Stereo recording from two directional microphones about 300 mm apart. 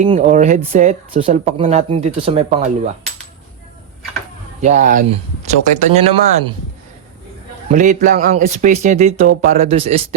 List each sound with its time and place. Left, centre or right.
0.0 s speech: right
4.6 s speech: right
7.8 s speech: right